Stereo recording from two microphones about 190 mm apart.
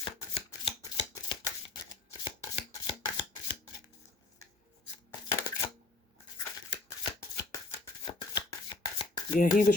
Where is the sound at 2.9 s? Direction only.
30° left (ahead or behind).